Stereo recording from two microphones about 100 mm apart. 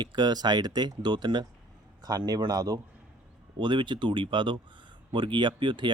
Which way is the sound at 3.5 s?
50° right (ahead or behind).